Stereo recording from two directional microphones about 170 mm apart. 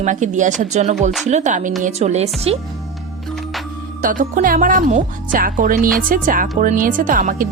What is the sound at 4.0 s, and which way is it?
Speech, 50° right (ahead or behind).